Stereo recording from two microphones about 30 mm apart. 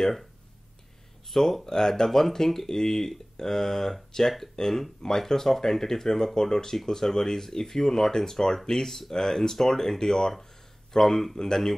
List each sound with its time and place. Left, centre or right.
0.0 s speech: centre
1.3 s speech: centre
1.7 s speech: centre